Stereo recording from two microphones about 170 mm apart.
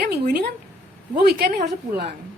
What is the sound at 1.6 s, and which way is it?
Speech, 70° right (ahead or behind).